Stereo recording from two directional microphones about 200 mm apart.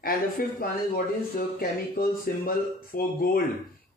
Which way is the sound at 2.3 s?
50° left (ahead or behind).